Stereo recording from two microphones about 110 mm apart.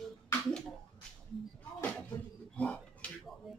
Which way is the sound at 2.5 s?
10° left (ahead or behind).